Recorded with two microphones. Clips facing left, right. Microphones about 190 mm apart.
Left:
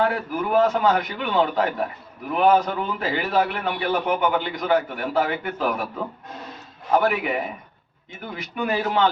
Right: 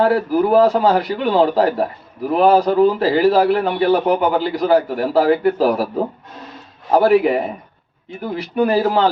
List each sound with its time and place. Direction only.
0.0 s a man's voice: 35° right (ahead or behind)